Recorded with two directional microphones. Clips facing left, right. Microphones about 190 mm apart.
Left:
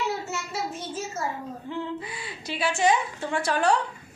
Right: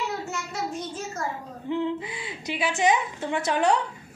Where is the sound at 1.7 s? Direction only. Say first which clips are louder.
Right 6 dB; 20° right (ahead or behind).